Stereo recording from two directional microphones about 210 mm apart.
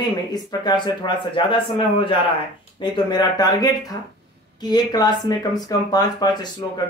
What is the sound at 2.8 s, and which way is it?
A man's voice, 20° left (ahead or behind).